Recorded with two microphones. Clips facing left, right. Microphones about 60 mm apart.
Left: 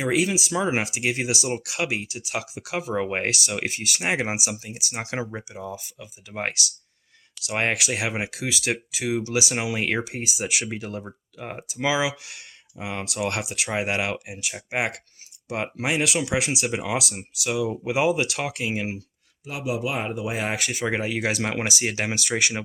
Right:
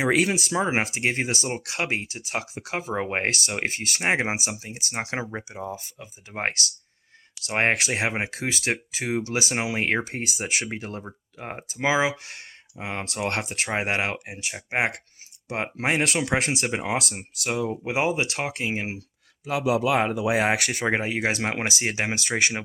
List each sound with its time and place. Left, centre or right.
0.0 s speech: right
0.5 s speech: right
19.7 s speech: right
20.8 s speech: right